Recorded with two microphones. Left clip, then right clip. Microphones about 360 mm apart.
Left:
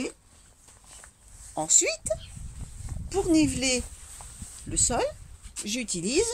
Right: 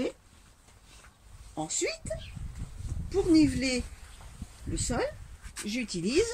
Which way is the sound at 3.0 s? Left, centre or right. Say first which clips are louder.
Even; centre.